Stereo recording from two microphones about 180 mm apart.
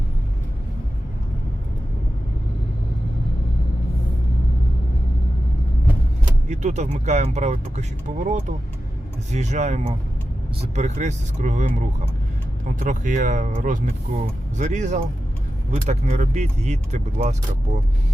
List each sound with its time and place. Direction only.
6.5 s speech: 40° right (ahead or behind)
12.8 s speech: 45° right (ahead or behind)